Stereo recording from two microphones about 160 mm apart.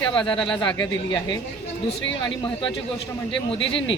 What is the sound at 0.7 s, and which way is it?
Speech, 25° left (ahead or behind).